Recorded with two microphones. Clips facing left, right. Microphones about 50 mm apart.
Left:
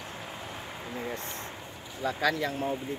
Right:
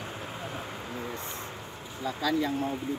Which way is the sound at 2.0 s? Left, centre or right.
Left.